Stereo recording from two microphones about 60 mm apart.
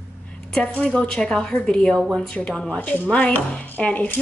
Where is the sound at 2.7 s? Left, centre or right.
Left.